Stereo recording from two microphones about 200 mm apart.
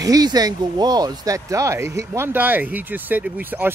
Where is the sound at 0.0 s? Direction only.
20° right (ahead or behind).